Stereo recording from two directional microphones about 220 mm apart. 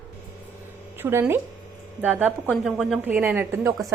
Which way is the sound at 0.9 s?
10° right (ahead or behind).